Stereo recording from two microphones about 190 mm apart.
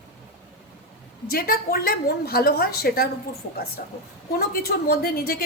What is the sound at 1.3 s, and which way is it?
A woman's voice, 55° left (ahead or behind).